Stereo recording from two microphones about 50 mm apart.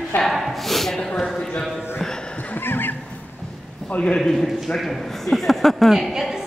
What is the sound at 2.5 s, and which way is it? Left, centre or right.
Neigh, left.